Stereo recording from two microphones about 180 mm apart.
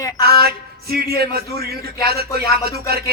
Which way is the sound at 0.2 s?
60° right (ahead or behind).